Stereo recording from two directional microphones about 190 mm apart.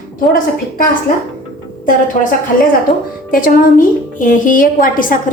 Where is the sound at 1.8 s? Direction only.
45° left (ahead or behind).